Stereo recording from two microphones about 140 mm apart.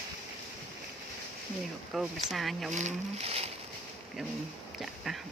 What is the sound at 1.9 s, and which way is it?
Speech, centre (ahead or behind).